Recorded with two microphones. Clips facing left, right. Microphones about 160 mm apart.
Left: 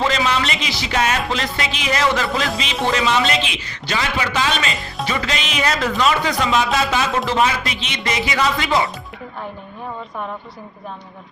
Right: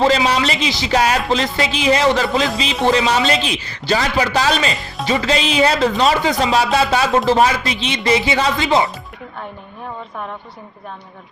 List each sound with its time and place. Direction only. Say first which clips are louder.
0.0 s a man's voice: right 4 dB; 35° right (ahead or behind)